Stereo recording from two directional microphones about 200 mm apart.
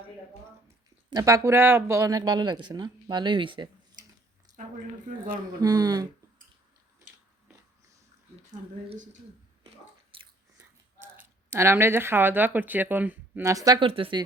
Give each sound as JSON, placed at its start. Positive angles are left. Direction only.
{"t": 1.1, "sound": "speech", "side_deg": -15}
{"t": 4.5, "sound": "a sound", "side_deg": -15}
{"t": 5.1, "sound": "speech", "side_deg": -40}
{"t": 5.5, "sound": "speech", "side_deg": -20}
{"t": 10.1, "sound": "biting", "side_deg": -25}
{"t": 11.0, "sound": "speech", "side_deg": -10}